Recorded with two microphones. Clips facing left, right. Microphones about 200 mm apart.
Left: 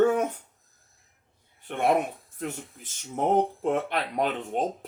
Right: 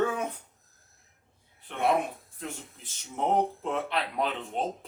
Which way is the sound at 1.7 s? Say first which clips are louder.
Left 3 dB; 55° left (ahead or behind).